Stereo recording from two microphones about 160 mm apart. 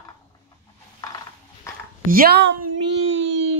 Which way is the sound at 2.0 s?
65° right (ahead or behind).